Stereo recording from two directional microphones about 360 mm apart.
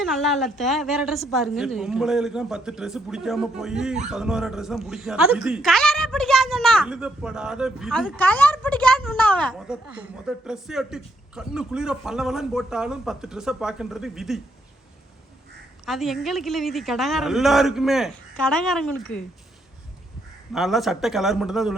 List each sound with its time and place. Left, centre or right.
0.0 s speech: centre
15.9 s speech: centre
20.5 s speech: centre